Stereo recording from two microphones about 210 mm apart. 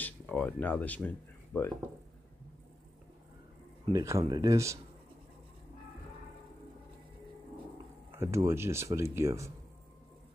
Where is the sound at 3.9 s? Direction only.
15° right (ahead or behind).